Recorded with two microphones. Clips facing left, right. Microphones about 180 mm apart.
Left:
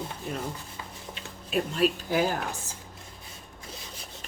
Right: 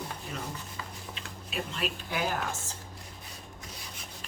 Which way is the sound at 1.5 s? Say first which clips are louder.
Left 9 dB; 40° left (ahead or behind).